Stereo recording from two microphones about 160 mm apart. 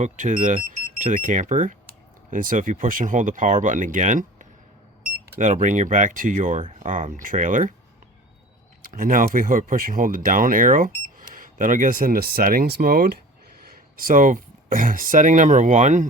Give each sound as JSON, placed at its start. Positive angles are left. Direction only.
{"t": 0.0, "sound": "speech", "side_deg": -50}
{"t": 8.8, "sound": "speech", "side_deg": -60}
{"t": 13.7, "sound": "speech", "side_deg": -60}